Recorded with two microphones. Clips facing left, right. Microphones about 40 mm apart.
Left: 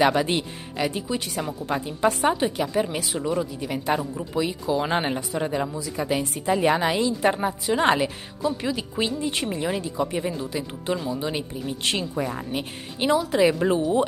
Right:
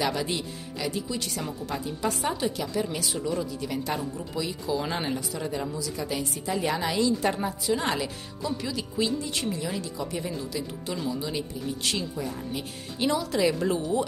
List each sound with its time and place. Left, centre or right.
0.0 s a woman's voice: left
13.0 s a woman's voice: left